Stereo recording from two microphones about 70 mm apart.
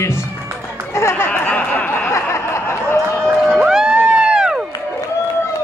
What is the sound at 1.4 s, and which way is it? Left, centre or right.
Snicker, left.